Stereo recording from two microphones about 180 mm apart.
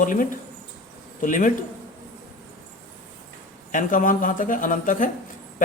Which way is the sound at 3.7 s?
50° left (ahead or behind).